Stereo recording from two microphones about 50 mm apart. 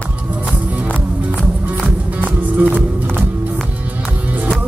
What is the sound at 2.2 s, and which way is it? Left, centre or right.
Music, right.